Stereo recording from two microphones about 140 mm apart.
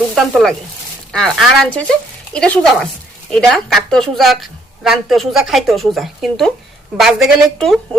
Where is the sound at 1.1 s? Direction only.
Centre (ahead or behind).